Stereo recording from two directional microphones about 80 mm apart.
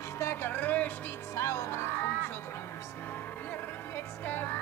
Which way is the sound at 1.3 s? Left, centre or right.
Left.